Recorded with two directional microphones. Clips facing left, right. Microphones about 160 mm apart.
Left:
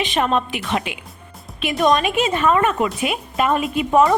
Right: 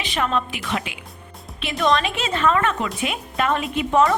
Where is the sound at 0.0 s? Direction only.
20° left (ahead or behind).